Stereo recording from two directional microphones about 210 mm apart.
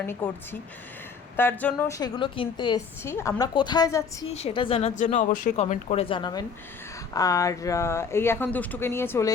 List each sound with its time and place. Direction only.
0.0 s a woman's voice: 10° left (ahead or behind)
1.4 s a woman's voice: 10° left (ahead or behind)
4.3 s a woman's voice: 30° left (ahead or behind); by 9.3 s 10° left (ahead or behind)